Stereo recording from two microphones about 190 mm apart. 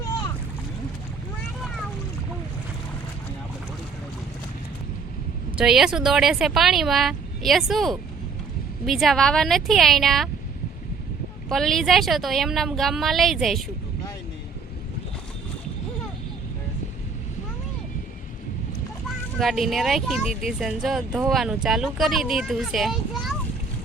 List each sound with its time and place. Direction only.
5.5 s speech: 5° right (ahead or behind)
11.4 s speech: centre (ahead or behind)
19.4 s speech: centre (ahead or behind)